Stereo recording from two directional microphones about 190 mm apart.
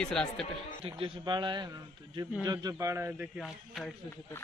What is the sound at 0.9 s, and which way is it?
A man's voice, 25° right (ahead or behind).